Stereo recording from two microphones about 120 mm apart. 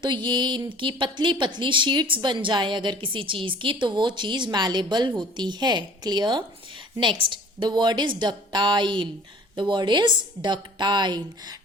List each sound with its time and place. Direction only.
0.0 s a woman's voice: 40° right (ahead or behind)